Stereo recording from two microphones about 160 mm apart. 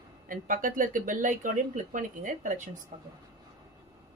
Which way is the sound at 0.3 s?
55° right (ahead or behind).